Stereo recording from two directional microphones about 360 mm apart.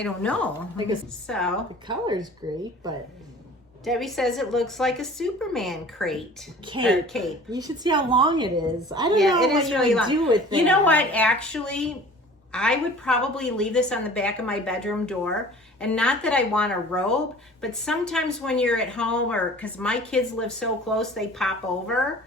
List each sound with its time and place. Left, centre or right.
0.0 s speech: centre
1.9 s a woman's voice: centre
3.8 s speech: centre
7.5 s a woman's voice: centre
9.4 s speech: centre
10.1 s a woman's voice: centre
10.6 s speech: centre